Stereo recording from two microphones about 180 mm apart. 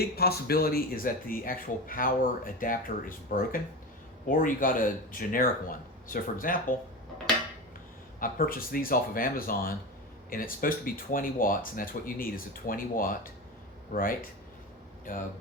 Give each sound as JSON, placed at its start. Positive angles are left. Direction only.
{"t": 0.0, "sound": "speech", "side_deg": 60}
{"t": 8.2, "sound": "speech", "side_deg": 50}